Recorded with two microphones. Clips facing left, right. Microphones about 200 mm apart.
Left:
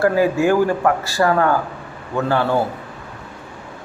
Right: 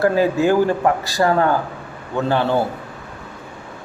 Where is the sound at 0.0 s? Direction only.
20° right (ahead or behind).